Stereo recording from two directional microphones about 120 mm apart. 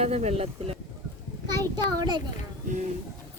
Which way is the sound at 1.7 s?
35° right (ahead or behind).